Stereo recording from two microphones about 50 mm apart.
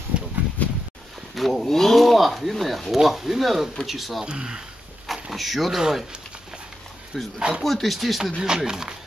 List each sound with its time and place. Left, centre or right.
0.1 s a sound: right
0.6 s a sound: left
1.3 s speech: centre
4.3 s speech: centre
5.0 s a sound: centre
5.8 s speech: centre
7.3 s speech: centre
7.6 s speech: centre
8.4 s speech: centre